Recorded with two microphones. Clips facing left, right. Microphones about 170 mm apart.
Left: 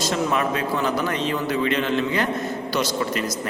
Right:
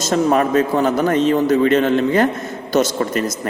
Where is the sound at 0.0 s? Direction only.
45° right (ahead or behind).